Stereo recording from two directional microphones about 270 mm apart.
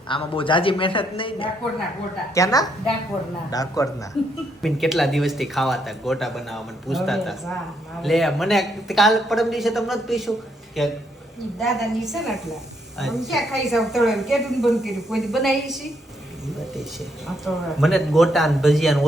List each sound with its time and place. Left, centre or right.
0.1 s a woman's voice: centre
4.6 s speech: centre
17.2 s speech: centre